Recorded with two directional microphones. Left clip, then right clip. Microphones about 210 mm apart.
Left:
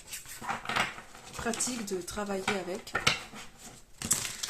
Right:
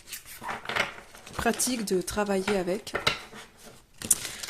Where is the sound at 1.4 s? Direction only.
40° right (ahead or behind).